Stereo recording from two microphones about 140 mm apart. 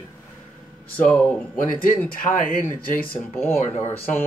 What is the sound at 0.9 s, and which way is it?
Speech, 10° left (ahead or behind).